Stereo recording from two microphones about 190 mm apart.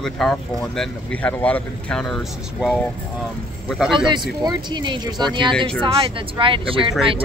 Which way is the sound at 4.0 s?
25° right (ahead or behind).